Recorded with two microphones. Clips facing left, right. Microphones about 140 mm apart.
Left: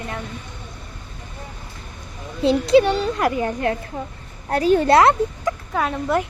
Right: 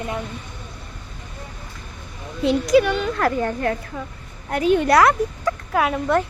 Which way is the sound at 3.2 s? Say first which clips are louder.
Even; 15° left (ahead or behind).